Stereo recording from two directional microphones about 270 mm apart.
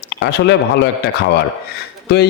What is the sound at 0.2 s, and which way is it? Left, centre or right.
Speech, left.